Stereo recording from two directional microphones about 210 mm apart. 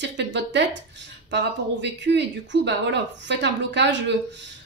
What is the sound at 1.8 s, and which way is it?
Speech, 55° right (ahead or behind).